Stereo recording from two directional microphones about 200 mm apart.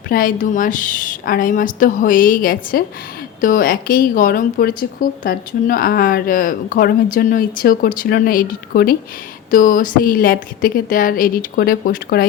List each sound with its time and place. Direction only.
0.1 s a woman's voice: 45° left (ahead or behind)